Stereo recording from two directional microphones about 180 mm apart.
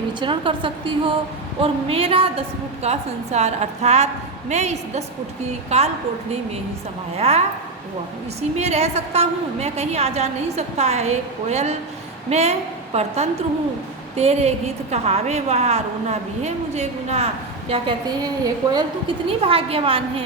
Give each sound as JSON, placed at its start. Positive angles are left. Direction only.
{"t": 0.2, "sound": "a woman's voice", "side_deg": -25}
{"t": 7.2, "sound": "a woman's voice", "side_deg": -35}